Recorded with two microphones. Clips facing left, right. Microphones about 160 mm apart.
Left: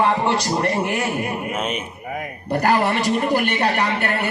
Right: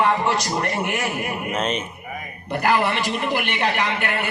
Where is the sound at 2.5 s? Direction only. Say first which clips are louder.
Left 2 dB; 40° left (ahead or behind).